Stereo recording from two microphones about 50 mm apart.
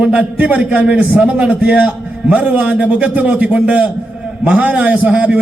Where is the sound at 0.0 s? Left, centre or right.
Right.